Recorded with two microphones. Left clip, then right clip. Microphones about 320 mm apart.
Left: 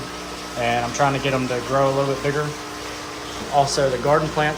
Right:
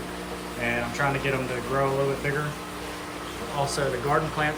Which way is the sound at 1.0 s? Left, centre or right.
Centre.